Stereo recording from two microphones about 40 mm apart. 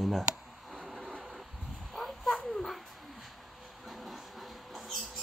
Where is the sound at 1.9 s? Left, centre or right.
Centre.